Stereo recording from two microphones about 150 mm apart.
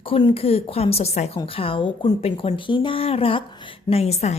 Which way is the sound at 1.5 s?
35° left (ahead or behind).